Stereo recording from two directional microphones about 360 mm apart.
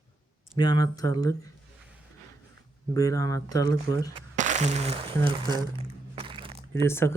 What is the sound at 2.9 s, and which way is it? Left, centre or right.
Speech, centre.